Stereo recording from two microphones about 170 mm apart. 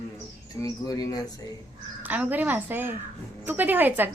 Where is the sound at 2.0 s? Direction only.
10° right (ahead or behind).